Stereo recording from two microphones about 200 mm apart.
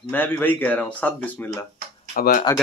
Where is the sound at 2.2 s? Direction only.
45° left (ahead or behind).